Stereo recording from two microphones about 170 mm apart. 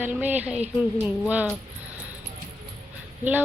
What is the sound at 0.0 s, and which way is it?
Speech, 10° right (ahead or behind).